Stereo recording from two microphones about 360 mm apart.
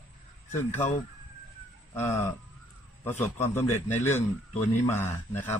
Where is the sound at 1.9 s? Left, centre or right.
Centre.